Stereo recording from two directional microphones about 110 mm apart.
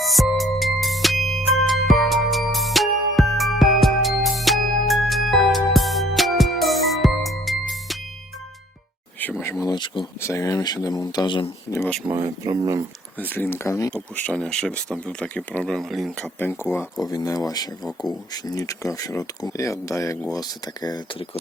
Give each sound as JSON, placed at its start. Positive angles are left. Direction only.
{"t": 0.0, "sound": "music", "side_deg": 0}
{"t": 9.4, "sound": "a sound", "side_deg": 25}
{"t": 9.6, "sound": "a sound", "side_deg": 45}
{"t": 10.2, "sound": "speech", "side_deg": 25}
{"t": 12.1, "sound": "speech", "side_deg": -30}
{"t": 13.1, "sound": "speech", "side_deg": 15}
{"t": 13.9, "sound": "speech", "side_deg": 10}
{"t": 16.4, "sound": "speech", "side_deg": 20}
{"t": 17.0, "sound": "speech", "side_deg": 35}